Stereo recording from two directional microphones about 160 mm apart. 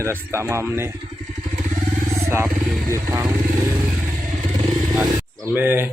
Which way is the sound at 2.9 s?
20° right (ahead or behind).